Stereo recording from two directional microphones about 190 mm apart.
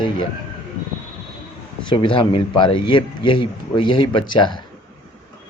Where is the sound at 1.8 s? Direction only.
25° left (ahead or behind).